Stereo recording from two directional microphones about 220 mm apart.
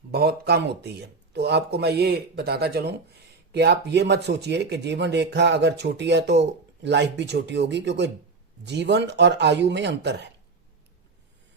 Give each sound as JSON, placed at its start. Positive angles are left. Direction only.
{"t": 0.1, "sound": "speech", "side_deg": -45}